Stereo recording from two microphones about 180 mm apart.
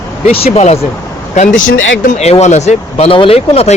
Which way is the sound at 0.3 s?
35° left (ahead or behind).